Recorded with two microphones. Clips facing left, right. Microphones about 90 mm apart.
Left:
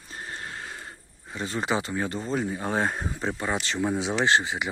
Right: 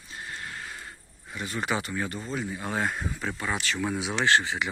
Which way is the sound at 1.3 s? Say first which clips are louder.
Left 2 dB; 30° left (ahead or behind).